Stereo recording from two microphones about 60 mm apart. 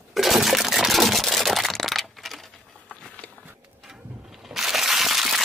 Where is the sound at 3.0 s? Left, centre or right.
Centre.